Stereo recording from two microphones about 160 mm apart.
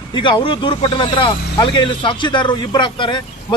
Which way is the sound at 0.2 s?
30° left (ahead or behind).